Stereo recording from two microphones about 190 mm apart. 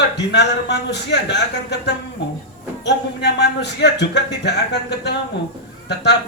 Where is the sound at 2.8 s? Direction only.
60° left (ahead or behind).